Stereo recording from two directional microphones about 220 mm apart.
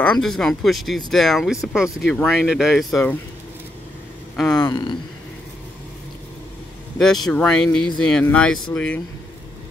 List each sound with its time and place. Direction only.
0.0 s speech: 5° left (ahead or behind)
4.4 s speech: centre (ahead or behind)
4.6 s a man's voice: 20° left (ahead or behind)
7.0 s speech: centre (ahead or behind)